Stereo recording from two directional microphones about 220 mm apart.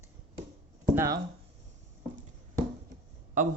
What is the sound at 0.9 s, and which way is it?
Speech, 15° right (ahead or behind).